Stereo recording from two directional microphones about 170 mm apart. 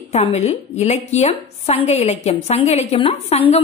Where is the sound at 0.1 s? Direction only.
40° left (ahead or behind).